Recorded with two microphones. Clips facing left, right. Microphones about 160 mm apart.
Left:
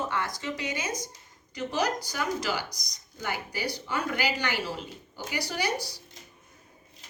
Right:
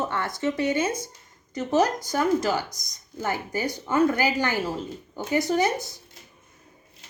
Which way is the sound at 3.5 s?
50° right (ahead or behind).